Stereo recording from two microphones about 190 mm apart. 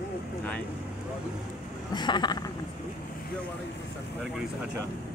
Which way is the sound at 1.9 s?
25° left (ahead or behind).